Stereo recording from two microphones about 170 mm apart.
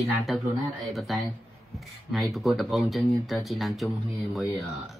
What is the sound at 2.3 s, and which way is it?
Speech, centre (ahead or behind).